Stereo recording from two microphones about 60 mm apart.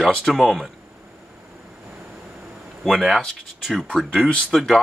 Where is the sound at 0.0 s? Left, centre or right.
Centre.